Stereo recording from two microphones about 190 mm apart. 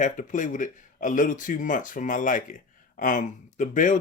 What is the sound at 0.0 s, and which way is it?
Speech, 40° left (ahead or behind).